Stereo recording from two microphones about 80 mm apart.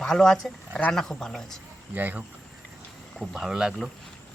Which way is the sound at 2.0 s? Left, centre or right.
Right.